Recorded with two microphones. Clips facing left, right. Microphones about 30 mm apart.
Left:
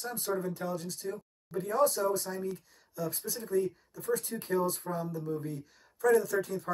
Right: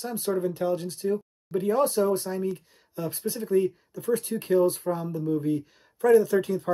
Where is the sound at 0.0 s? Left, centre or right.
Right.